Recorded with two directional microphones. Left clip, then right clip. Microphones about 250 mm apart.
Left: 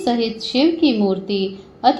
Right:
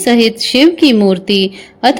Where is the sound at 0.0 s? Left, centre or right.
Right.